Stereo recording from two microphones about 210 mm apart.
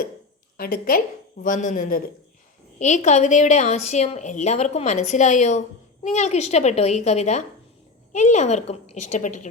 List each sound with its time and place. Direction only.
0.5 s a woman's voice: 45° left (ahead or behind)